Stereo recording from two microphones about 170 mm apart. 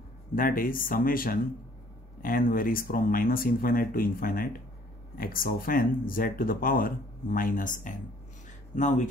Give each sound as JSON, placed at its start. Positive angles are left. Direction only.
{"t": 0.4, "sound": "speech", "side_deg": 55}